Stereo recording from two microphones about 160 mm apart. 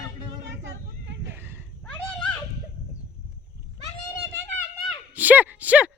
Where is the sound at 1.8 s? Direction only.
5° left (ahead or behind).